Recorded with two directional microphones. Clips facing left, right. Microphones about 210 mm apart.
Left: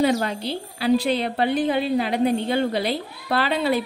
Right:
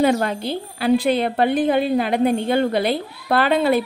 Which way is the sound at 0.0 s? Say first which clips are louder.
Right 3 dB; 55° right (ahead or behind).